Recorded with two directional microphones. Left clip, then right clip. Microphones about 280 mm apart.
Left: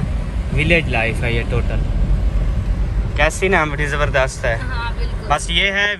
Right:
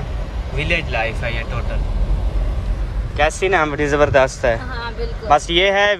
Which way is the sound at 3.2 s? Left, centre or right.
Centre.